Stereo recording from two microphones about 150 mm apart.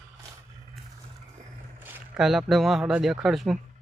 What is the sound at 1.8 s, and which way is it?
Speech, 5° right (ahead or behind).